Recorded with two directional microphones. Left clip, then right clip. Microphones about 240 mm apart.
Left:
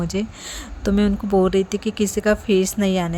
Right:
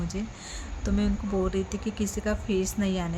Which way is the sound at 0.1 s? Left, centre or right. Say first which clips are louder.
Left 10 dB; left.